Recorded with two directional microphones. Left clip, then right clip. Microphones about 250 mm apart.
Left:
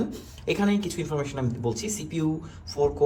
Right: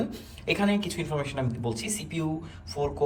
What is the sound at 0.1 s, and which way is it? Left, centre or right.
A woman's voice, centre.